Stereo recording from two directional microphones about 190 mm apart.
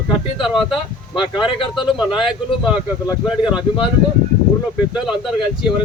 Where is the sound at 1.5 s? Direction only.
25° left (ahead or behind).